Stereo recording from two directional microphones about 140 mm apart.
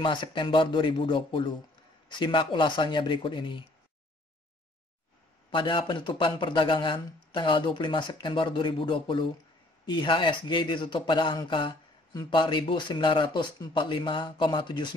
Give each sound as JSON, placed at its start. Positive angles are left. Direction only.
{"t": 0.0, "sound": "a man's voice", "side_deg": 35}
{"t": 5.5, "sound": "a man's voice", "side_deg": 35}